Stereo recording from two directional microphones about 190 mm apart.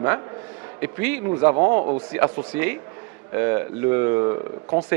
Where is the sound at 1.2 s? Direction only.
25° right (ahead or behind).